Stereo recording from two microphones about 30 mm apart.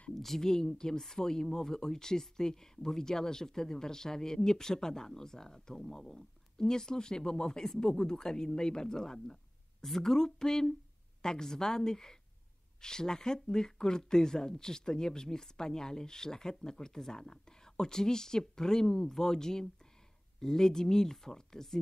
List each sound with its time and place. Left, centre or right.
0.1 s speech: centre